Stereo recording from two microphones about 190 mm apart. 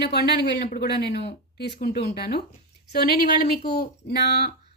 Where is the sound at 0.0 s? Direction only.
60° left (ahead or behind).